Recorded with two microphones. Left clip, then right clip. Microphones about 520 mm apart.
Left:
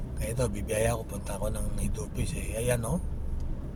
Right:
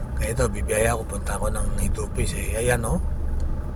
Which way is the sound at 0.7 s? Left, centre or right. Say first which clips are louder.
Right 6 dB; left.